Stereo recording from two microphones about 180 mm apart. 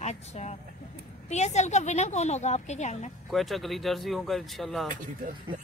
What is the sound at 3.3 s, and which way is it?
Speech, centre (ahead or behind).